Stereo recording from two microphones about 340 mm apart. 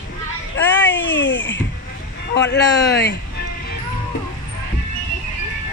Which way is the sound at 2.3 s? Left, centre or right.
Left.